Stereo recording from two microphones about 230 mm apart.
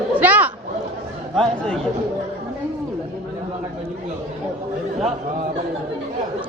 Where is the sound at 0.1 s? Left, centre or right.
Centre.